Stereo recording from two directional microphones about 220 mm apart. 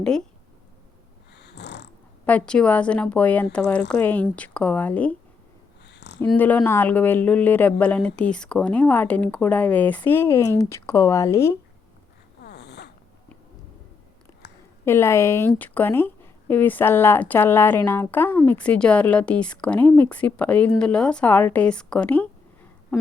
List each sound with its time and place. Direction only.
1.4 s snoring: 50° left (ahead or behind)
2.2 s a woman's voice: 5° left (ahead or behind)
5.8 s a sound: 50° left (ahead or behind)
6.1 s a woman's voice: 5° left (ahead or behind)
12.4 s snort: 50° left (ahead or behind)
14.8 s a woman's voice: 10° left (ahead or behind)